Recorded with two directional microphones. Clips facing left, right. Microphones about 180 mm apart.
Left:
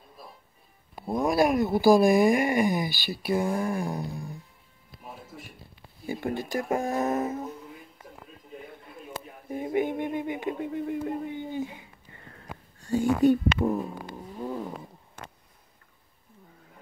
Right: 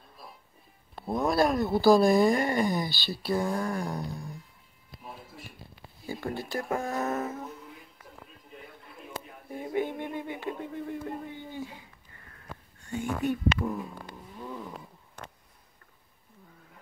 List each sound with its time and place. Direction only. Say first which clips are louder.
0.9 s speech: left 2 dB; 15° left (ahead or behind)
6.0 s speech: left 4 dB; 20° left (ahead or behind)
9.5 s music: left 4 dB; 15° left (ahead or behind)
12.8 s speech: left 9 dB; 35° left (ahead or behind)
14.1 s vehicle: left 8 dB; 35° left (ahead or behind)